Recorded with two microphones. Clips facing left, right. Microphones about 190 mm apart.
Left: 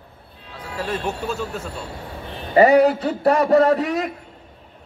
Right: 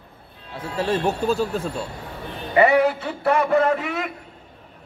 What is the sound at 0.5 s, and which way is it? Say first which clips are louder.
Speech: right 4 dB; 25° right (ahead or behind).